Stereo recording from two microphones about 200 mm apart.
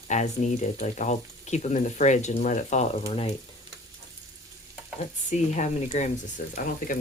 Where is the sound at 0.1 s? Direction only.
35° left (ahead or behind).